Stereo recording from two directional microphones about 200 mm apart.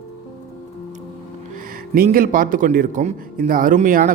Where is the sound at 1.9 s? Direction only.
45° right (ahead or behind).